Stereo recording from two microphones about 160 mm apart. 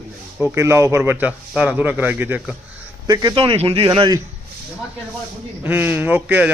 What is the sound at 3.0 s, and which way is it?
A man's voice, 25° right (ahead or behind).